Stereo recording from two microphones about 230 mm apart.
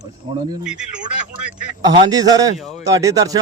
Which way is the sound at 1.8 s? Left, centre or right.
Centre.